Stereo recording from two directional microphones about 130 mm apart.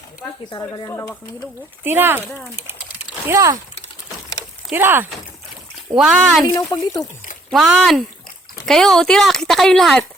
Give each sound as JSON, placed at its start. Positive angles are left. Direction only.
{"t": 0.5, "sound": "speech", "side_deg": 30}
{"t": 1.8, "sound": "speech", "side_deg": -15}
{"t": 4.7, "sound": "speech", "side_deg": -15}
{"t": 6.0, "sound": "speech", "side_deg": -5}
{"t": 6.5, "sound": "speech", "side_deg": 25}
{"t": 7.5, "sound": "speech", "side_deg": 0}